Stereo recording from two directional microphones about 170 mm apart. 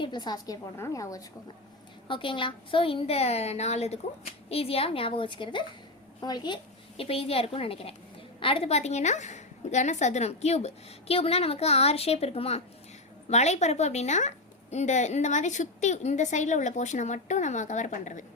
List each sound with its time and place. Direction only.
0.0 s a woman's voice: 25° left (ahead or behind)
2.0 s a woman's voice: 30° left (ahead or behind); by 18.3 s 45° left (ahead or behind)